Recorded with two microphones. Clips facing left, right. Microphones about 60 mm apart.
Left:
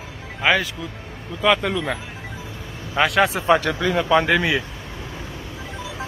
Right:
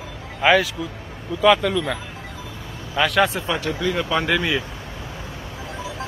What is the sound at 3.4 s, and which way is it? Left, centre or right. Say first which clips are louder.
Speech: left 4 dB; left.